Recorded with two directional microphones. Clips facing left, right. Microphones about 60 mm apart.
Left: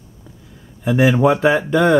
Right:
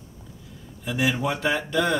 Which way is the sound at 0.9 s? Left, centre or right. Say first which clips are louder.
Left 11 dB; left.